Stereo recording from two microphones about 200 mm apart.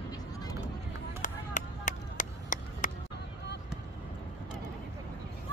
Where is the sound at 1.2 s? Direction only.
40° left (ahead or behind).